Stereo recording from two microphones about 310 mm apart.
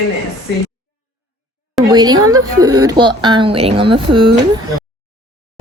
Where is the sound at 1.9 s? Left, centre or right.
Centre.